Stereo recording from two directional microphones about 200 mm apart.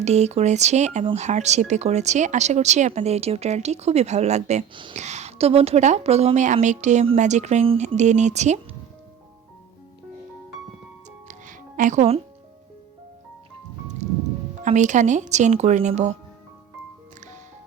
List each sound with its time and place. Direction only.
0.0 s speech: 35° right (ahead or behind)
11.3 s music: 40° right (ahead or behind)
14.6 s speech: 35° right (ahead or behind)